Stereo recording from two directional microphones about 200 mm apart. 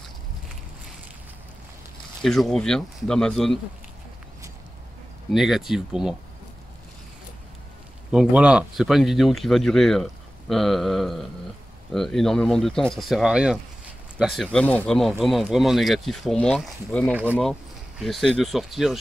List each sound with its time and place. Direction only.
2.2 s speech: centre (ahead or behind)
5.3 s speech: centre (ahead or behind)
8.1 s speech: 5° right (ahead or behind)
17.1 s speech: 10° right (ahead or behind)